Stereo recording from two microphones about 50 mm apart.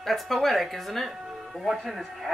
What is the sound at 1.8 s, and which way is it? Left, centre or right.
Speech, centre.